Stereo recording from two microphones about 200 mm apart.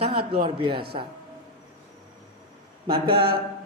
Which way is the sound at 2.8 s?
25° right (ahead or behind).